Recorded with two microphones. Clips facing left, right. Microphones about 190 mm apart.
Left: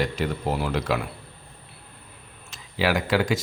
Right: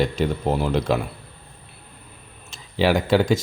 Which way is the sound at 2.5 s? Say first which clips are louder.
Right 4 dB; 25° right (ahead or behind).